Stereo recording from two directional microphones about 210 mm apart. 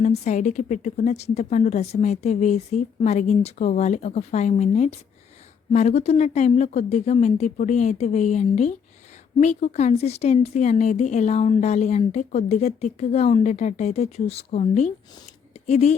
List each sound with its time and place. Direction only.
0.0 s speech: 35° left (ahead or behind)